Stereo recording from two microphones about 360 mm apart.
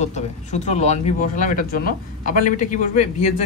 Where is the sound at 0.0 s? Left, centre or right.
Centre.